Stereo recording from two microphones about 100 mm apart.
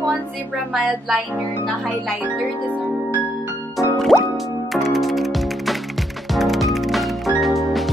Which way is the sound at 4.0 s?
5° left (ahead or behind).